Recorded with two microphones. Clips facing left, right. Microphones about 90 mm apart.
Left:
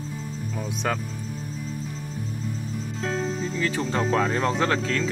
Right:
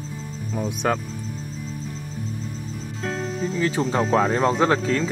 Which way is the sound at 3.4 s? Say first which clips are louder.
Right 4 dB; 10° right (ahead or behind).